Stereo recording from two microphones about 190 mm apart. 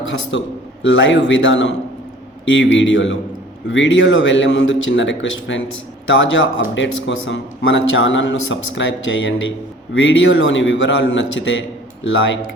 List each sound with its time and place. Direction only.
0.1 s a man's voice: 70° left (ahead or behind)